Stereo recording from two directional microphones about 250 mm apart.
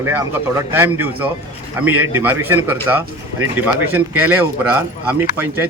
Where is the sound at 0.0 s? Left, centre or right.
Centre.